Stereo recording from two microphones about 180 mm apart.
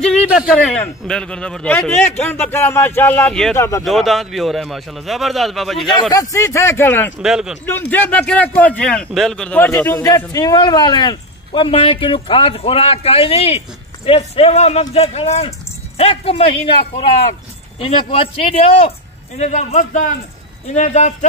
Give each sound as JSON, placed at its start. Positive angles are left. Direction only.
{"t": 0.0, "sound": "a sound", "side_deg": 0}
{"t": 0.5, "sound": "speech", "side_deg": 5}
{"t": 3.8, "sound": "speech", "side_deg": 0}
{"t": 6.3, "sound": "speech", "side_deg": 15}
{"t": 7.2, "sound": "speech", "side_deg": -5}
{"t": 7.6, "sound": "speech", "side_deg": 10}